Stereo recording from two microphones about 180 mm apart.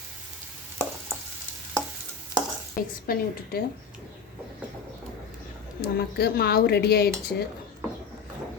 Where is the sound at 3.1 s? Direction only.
55° left (ahead or behind).